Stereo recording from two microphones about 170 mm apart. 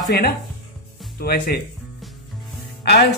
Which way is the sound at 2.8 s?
70° left (ahead or behind).